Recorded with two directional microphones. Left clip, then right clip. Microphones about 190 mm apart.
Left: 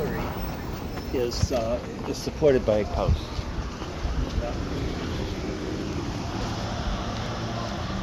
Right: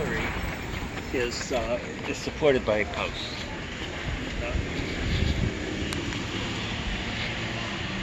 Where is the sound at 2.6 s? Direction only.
45° left (ahead or behind).